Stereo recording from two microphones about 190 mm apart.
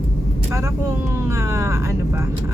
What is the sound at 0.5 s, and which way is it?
Speech, 15° right (ahead or behind).